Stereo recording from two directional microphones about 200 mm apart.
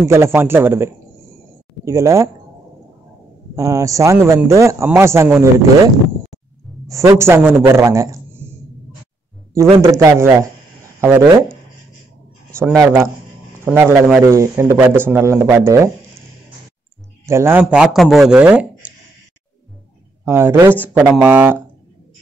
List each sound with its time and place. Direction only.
0.1 s a man's voice: 10° right (ahead or behind)
1.9 s a man's voice: 15° right (ahead or behind)
3.5 s a man's voice: 15° right (ahead or behind)
6.9 s a man's voice: 15° right (ahead or behind)
9.8 s a man's voice: 15° right (ahead or behind)
12.5 s a man's voice: 15° right (ahead or behind)
17.3 s a man's voice: 10° right (ahead or behind)
20.2 s a man's voice: 10° right (ahead or behind)